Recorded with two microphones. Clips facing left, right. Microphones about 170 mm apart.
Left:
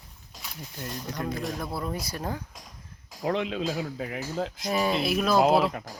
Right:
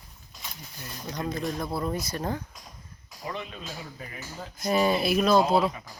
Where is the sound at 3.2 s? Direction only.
90° left.